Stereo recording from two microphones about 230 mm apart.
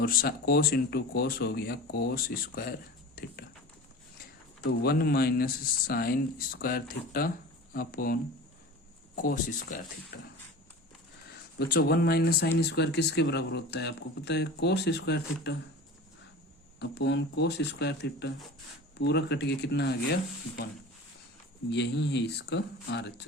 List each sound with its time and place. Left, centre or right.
0.0 s speech: left
4.8 s speech: left
11.6 s speech: left
16.8 s speech: left
21.7 s speech: left